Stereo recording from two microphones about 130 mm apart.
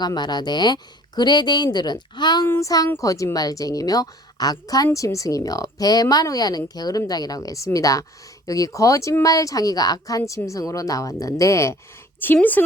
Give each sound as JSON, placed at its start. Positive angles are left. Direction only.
{"t": 0.0, "sound": "a woman's voice", "side_deg": 30}